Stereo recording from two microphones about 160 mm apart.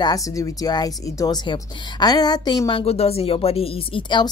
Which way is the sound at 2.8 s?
40° left (ahead or behind).